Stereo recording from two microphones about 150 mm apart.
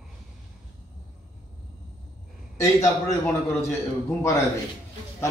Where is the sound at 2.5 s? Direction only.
20° left (ahead or behind).